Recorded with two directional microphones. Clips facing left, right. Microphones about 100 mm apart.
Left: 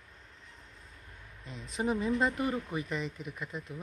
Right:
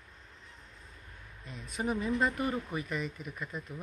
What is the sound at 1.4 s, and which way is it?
Speech, 30° left (ahead or behind).